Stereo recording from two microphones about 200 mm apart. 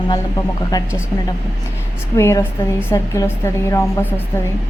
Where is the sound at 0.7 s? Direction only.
15° left (ahead or behind).